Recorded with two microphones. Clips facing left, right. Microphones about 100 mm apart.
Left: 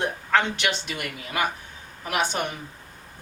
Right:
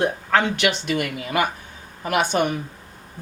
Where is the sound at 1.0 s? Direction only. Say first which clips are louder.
Right 6 dB; 55° right (ahead or behind).